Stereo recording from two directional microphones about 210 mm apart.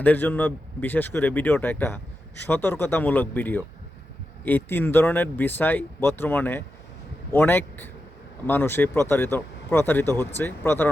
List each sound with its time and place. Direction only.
0.0 s speech: 10° left (ahead or behind)